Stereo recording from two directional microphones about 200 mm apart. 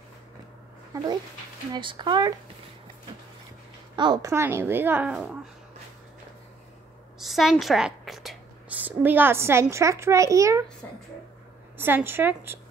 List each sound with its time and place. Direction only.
1.7 s speech: 25° right (ahead or behind)
3.9 s a child's voice: 20° right (ahead or behind); by 5.4 s 5° right (ahead or behind)
7.2 s a woman's voice: centre (ahead or behind)
11.8 s a child's voice: 10° right (ahead or behind)